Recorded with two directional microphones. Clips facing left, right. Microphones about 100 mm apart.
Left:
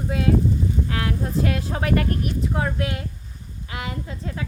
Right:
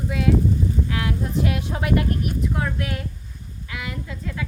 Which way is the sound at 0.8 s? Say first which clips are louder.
Even; 40° left (ahead or behind).